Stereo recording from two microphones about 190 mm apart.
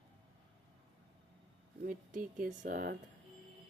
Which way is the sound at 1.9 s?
45° right (ahead or behind).